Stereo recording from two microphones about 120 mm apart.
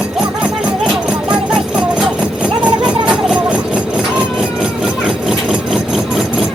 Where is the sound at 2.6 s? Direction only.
5° right (ahead or behind).